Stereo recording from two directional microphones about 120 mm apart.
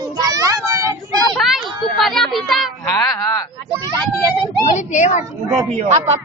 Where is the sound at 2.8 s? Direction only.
30° left (ahead or behind).